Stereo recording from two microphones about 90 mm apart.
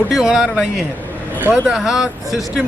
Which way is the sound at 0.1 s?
5° right (ahead or behind).